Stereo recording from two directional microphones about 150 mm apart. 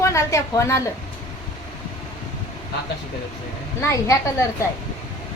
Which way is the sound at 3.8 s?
20° left (ahead or behind).